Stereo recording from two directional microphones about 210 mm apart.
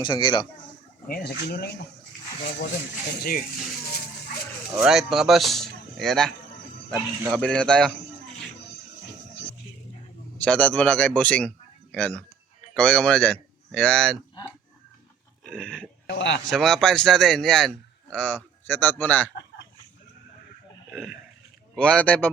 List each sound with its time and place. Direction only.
0.0 s speech: 20° left (ahead or behind)
1.0 s speech: 45° left (ahead or behind)
4.7 s a man's voice: 5° right (ahead or behind)
7.3 s a man's voice: 5° left (ahead or behind)
10.3 s a man's voice: 5° left (ahead or behind)
15.4 s speech: 5° left (ahead or behind)
16.0 s speech: 60° left (ahead or behind)
16.5 s a man's voice: centre (ahead or behind)
20.9 s a man's voice: centre (ahead or behind)